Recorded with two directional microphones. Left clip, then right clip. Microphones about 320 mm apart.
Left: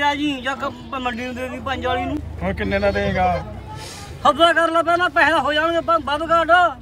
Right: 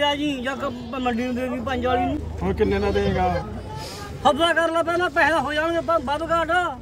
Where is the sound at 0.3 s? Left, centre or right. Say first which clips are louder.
Left 3 dB; centre.